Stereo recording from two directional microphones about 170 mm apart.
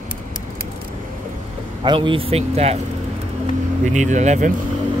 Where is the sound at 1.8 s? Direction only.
30° right (ahead or behind).